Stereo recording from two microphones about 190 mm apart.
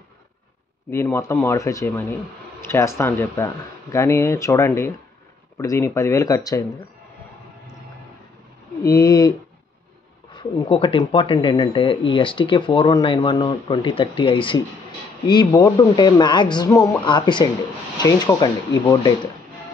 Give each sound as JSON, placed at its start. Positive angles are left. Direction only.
{"t": 0.8, "sound": "speech", "side_deg": 15}
{"t": 8.8, "sound": "speech", "side_deg": 15}
{"t": 10.3, "sound": "speech", "side_deg": 25}